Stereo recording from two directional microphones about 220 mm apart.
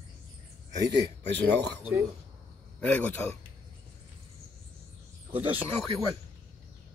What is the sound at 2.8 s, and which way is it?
Speech, 5° left (ahead or behind).